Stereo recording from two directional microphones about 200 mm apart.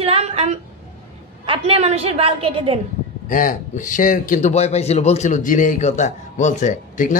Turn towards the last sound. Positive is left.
turn(degrees=40)  # may be behind; listen again after turning